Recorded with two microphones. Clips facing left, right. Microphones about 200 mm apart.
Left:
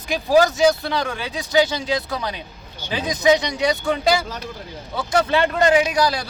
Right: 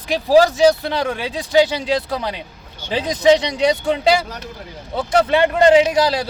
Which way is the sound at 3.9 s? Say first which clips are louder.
Right 3 dB; 20° right (ahead or behind).